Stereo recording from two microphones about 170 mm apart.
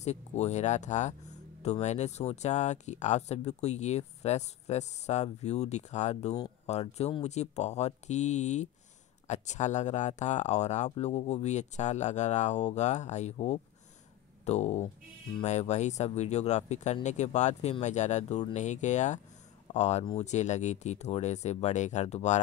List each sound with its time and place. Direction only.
0.0 s speech: 40° left (ahead or behind)